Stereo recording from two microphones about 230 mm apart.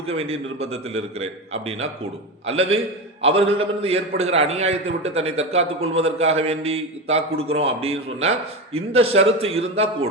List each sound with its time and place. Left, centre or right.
0.1 s a man's voice: right